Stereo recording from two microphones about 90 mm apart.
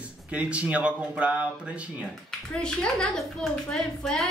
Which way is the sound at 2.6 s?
5° left (ahead or behind).